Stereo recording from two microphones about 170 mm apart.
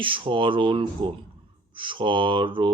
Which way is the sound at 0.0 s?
30° right (ahead or behind).